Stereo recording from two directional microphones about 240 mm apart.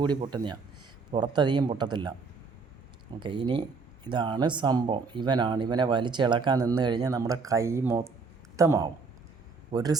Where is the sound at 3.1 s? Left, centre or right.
Centre.